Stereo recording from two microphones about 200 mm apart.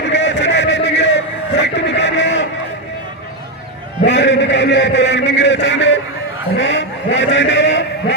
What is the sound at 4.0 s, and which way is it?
A man's voice, 60° left (ahead or behind).